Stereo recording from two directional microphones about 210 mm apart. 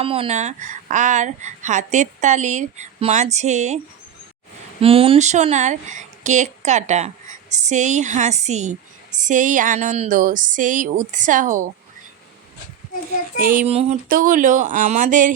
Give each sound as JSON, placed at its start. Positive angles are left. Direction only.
{"t": 0.0, "sound": "a woman's voice", "side_deg": -25}
{"t": 4.8, "sound": "a woman's voice", "side_deg": -25}
{"t": 13.4, "sound": "a woman's voice", "side_deg": -40}